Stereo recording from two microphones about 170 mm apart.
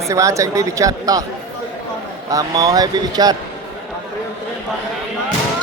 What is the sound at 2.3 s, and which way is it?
A man's voice, 20° right (ahead or behind).